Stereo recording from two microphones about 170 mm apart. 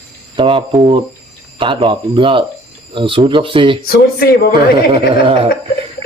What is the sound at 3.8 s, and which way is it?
Speech, 65° left (ahead or behind).